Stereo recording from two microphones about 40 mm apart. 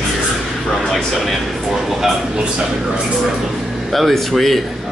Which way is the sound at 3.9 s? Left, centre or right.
Centre.